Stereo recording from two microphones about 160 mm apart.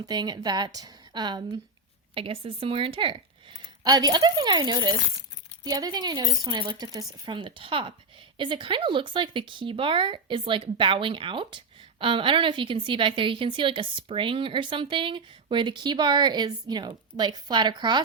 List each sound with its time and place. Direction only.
0.0 s a woman's voice: 25° right (ahead or behind)